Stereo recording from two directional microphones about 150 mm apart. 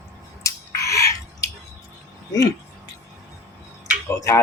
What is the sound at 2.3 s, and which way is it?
Speech, 25° left (ahead or behind).